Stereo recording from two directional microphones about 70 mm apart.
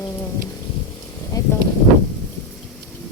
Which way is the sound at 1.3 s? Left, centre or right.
Left.